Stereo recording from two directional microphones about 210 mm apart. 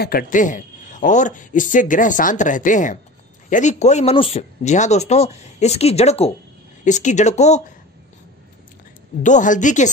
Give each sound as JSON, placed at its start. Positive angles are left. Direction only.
{"t": 0.0, "sound": "speech", "side_deg": 45}
{"t": 9.2, "sound": "speech", "side_deg": 35}